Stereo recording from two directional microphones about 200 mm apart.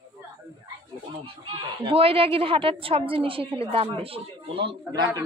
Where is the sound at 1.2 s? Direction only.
25° right (ahead or behind).